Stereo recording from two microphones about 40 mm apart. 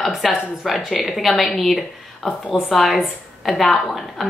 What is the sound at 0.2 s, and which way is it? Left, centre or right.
A woman's voice, centre.